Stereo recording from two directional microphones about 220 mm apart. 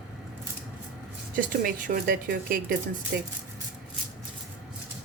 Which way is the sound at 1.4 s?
40° right (ahead or behind).